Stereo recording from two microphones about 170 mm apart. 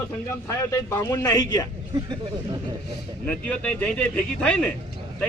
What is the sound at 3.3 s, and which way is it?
Speech, 10° left (ahead or behind).